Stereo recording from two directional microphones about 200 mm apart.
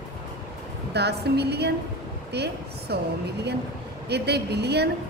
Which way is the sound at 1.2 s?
55° right (ahead or behind).